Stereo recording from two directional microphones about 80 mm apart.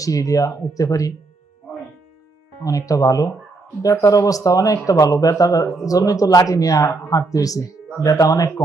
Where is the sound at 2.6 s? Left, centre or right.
Left.